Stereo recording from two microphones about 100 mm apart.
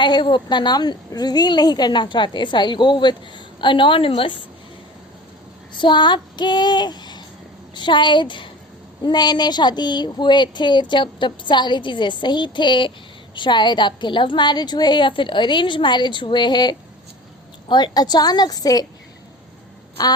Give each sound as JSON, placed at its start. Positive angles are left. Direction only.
{"t": 0.0, "sound": "a woman's voice", "side_deg": 50}
{"t": 5.7, "sound": "a woman's voice", "side_deg": 50}